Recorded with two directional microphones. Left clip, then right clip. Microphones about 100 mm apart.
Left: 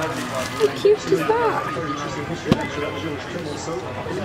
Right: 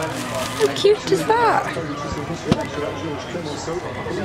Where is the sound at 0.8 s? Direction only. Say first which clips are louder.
Right 1 dB; 50° right (ahead or behind).